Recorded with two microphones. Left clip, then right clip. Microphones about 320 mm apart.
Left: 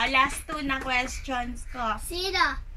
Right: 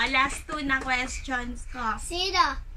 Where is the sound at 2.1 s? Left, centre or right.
Centre.